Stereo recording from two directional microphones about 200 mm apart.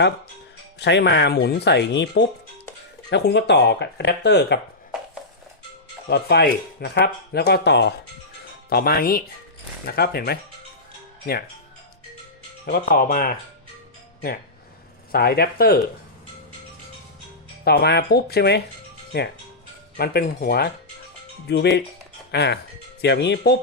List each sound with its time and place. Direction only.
0.8 s speech: 60° left (ahead or behind)
6.1 s speech: 55° left (ahead or behind)
12.6 s speech: 45° left (ahead or behind)
15.1 s speech: 50° left (ahead or behind)
17.7 s speech: 55° left (ahead or behind)
20.0 s speech: 50° left (ahead or behind)